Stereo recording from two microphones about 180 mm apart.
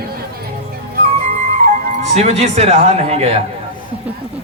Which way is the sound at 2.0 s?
40° right (ahead or behind).